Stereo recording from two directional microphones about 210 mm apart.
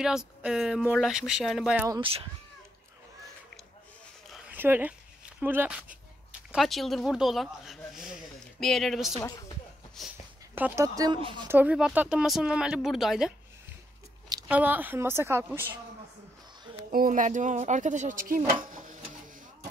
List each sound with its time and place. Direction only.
0.0 s speech: 5° right (ahead or behind)
1.9 s speech: 25° right (ahead or behind)
4.3 s a sound: 5° right (ahead or behind)
6.5 s speech: centre (ahead or behind)
10.5 s a woman's voice: 10° right (ahead or behind)
14.5 s a woman's voice: 5° right (ahead or behind)
16.9 s speech: 40° right (ahead or behind)
18.7 s a sound: 40° right (ahead or behind)